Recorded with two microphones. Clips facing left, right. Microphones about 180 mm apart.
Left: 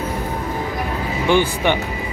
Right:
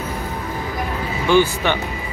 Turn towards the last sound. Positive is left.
turn(degrees=15)  # may be behind; listen again after turning